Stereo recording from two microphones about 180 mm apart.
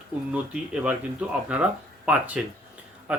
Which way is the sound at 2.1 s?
10° right (ahead or behind).